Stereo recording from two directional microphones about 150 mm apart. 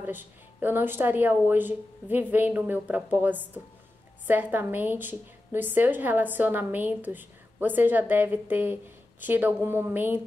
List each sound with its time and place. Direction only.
0.0 s a woman's voice: 10° right (ahead or behind)